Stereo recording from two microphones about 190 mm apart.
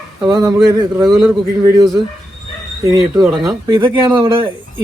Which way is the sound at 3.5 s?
25° right (ahead or behind).